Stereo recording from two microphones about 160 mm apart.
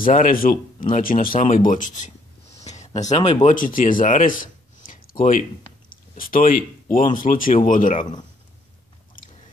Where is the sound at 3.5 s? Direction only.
55° left (ahead or behind).